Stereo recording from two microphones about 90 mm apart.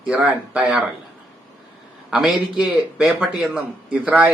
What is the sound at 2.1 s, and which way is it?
A man's voice, 5° right (ahead or behind).